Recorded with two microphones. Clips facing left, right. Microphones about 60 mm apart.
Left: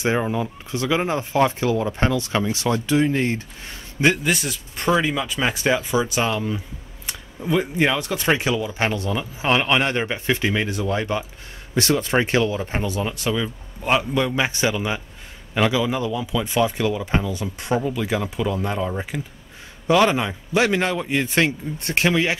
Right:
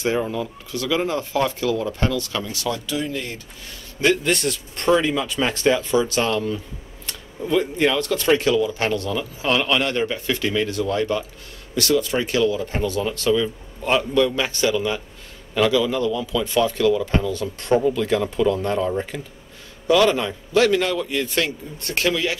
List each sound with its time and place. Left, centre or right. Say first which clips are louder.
0.0 s speech: left 1 dB; left
4.2 s speech: right 2 dB; centre
19.9 s speech: even; left